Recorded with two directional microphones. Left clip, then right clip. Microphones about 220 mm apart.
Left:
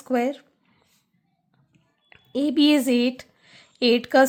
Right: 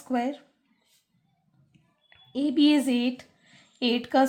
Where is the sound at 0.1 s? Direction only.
40° left (ahead or behind).